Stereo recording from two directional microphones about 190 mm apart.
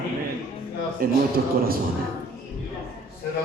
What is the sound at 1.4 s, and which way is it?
Speech, 60° right (ahead or behind).